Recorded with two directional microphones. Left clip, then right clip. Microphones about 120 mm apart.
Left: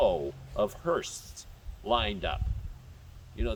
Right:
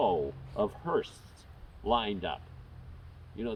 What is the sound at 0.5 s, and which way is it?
Speech, 40° left (ahead or behind).